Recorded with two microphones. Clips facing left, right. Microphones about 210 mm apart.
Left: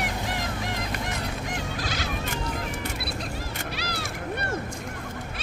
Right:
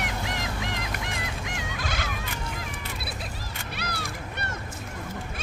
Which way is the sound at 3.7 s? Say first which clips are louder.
Right 2 dB; 55° right (ahead or behind).